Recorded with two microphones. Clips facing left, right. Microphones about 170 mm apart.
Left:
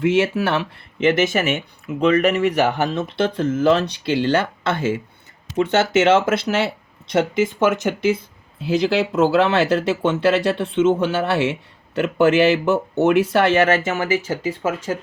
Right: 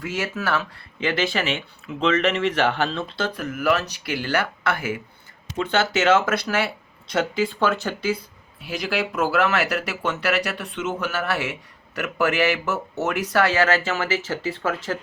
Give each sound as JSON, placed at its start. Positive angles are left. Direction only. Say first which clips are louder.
{"t": 0.0, "sound": "speech", "louder": "left 10 dB", "side_deg": 25}